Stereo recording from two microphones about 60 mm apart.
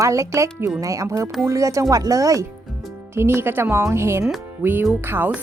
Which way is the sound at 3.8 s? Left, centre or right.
Right.